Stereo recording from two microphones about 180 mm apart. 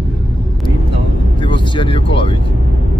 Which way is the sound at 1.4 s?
25° left (ahead or behind).